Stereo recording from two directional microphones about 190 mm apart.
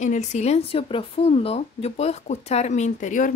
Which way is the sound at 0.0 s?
40° left (ahead or behind).